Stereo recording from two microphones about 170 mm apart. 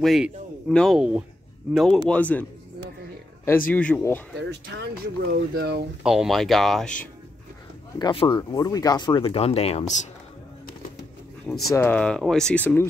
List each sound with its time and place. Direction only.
0.0 s speech: centre (ahead or behind)
3.7 s speech: 10° left (ahead or behind)
4.5 s speech: 80° right; by 5.9 s 65° right (ahead or behind)
6.0 s speech: centre (ahead or behind)
8.0 s speech: 30° left (ahead or behind)
11.4 s speech: centre (ahead or behind)